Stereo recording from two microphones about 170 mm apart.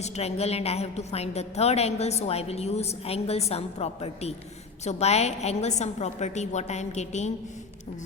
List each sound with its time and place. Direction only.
0.0 s a woman's voice: 40° left (ahead or behind)